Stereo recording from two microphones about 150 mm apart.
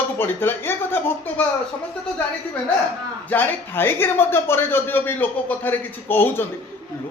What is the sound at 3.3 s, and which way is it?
Speech, 15° left (ahead or behind).